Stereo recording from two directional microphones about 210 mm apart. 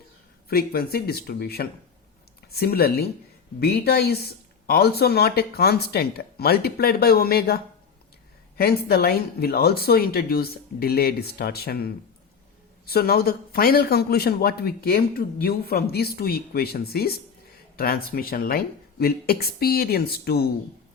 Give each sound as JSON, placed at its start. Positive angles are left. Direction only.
{"t": 0.4, "sound": "speech", "side_deg": 45}